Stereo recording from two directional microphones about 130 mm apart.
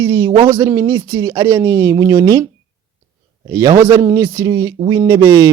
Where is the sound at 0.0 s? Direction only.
20° right (ahead or behind).